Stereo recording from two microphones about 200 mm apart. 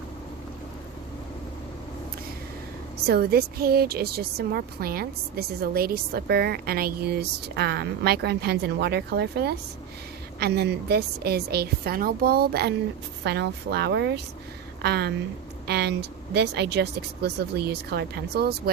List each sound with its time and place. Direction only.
3.0 s a woman's voice: 50° right (ahead or behind)